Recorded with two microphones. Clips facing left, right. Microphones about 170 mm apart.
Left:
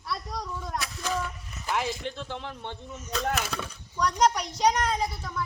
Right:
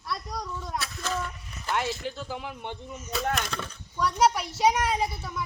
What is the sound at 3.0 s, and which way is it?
Speech, 5° right (ahead or behind).